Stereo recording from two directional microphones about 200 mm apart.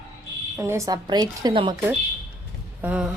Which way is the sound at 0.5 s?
15° right (ahead or behind).